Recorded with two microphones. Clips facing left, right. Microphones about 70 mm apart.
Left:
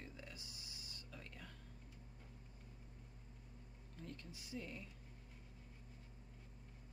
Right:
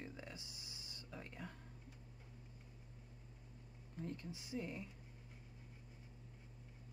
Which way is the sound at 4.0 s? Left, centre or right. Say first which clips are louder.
Right 6 dB; right.